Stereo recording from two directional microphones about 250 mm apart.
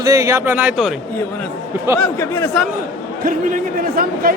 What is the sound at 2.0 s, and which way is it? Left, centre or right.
Speech, centre.